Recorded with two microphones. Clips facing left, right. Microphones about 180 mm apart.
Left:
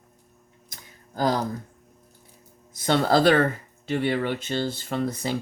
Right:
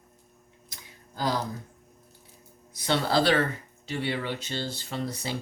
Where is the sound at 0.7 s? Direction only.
50° left (ahead or behind).